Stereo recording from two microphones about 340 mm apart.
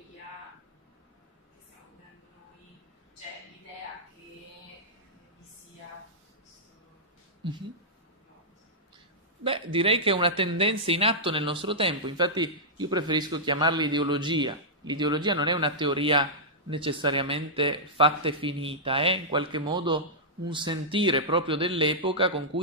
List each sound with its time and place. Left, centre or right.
7.4 s speech: centre
9.4 s speech: centre